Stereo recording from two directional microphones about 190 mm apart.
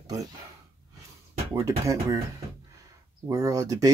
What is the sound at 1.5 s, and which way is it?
Speech, 15° right (ahead or behind).